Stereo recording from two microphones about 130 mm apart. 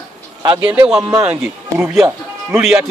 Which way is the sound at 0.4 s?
30° right (ahead or behind).